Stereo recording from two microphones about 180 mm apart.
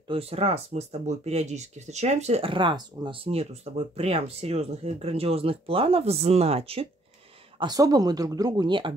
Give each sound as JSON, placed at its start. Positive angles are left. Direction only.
{"t": 0.1, "sound": "speech", "side_deg": -35}
{"t": 7.5, "sound": "speech", "side_deg": -20}